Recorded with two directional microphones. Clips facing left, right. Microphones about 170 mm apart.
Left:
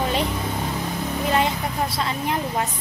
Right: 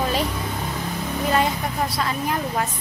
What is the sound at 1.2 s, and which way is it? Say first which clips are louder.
A woman's voice: right 1 dB; 20° left (ahead or behind).